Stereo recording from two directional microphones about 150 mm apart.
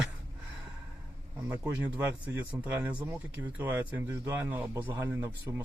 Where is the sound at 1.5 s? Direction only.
10° right (ahead or behind).